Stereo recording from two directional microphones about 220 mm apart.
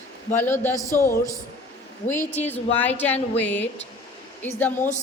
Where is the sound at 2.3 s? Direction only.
10° left (ahead or behind).